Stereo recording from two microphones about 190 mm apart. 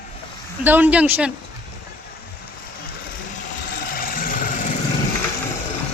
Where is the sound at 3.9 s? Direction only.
45° left (ahead or behind).